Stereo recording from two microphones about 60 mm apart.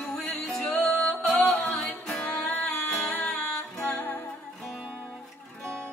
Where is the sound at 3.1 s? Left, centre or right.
Left.